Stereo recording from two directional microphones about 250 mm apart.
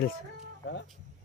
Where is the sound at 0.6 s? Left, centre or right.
Left.